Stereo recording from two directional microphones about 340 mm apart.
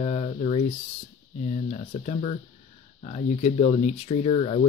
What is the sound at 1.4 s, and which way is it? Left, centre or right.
Speech, centre.